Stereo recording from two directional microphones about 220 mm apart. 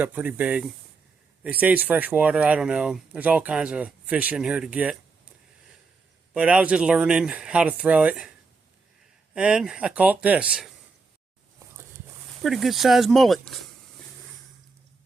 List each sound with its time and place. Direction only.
0.0 s speech: 10° right (ahead or behind)
6.3 s speech: 5° right (ahead or behind)
9.3 s speech: 5° right (ahead or behind)
12.4 s speech: centre (ahead or behind)